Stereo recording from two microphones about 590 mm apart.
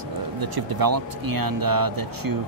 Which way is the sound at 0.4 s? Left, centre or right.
Right.